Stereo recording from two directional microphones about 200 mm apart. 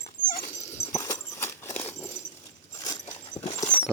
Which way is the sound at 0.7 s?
10° left (ahead or behind).